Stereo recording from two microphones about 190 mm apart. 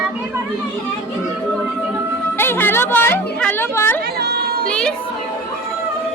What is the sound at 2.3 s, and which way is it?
A woman's voice, 10° left (ahead or behind).